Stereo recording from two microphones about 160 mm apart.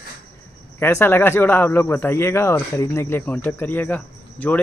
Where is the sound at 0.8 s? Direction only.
15° left (ahead or behind).